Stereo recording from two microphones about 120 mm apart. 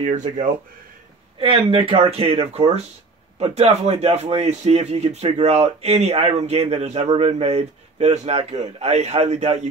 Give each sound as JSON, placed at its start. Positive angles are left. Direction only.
{"t": 0.0, "sound": "speech", "side_deg": -70}
{"t": 1.4, "sound": "a man's voice", "side_deg": -50}